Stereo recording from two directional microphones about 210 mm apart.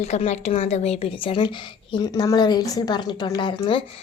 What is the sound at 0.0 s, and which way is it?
A woman's voice, 30° left (ahead or behind).